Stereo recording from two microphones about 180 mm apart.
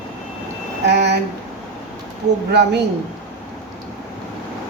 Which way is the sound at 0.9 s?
70° right (ahead or behind).